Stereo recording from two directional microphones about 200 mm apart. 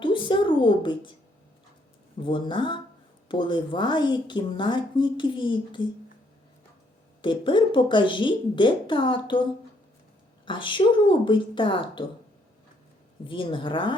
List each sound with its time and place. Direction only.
0.0 s a sound: 25° left (ahead or behind)
2.2 s speech: 25° left (ahead or behind)
7.2 s speech: 25° left (ahead or behind)
10.4 s speech: 25° left (ahead or behind)
13.2 s speech: 25° left (ahead or behind)